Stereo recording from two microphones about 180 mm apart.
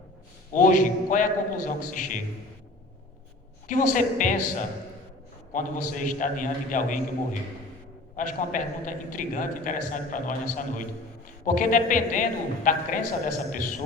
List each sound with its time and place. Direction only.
0.5 s a man's voice: 45° left (ahead or behind)
3.7 s a man's voice: 45° left (ahead or behind)
8.1 s a man's voice: 45° left (ahead or behind)